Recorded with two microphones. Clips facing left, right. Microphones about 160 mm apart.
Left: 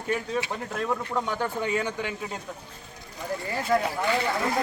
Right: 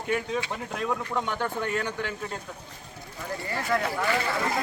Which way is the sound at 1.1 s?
10° left (ahead or behind).